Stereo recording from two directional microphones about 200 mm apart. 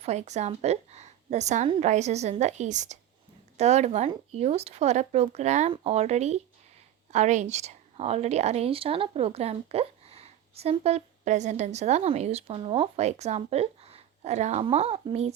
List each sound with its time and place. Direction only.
0.0 s a woman's voice: 35° right (ahead or behind)